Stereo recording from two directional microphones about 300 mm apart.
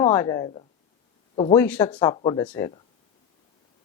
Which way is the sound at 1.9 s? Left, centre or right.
Centre.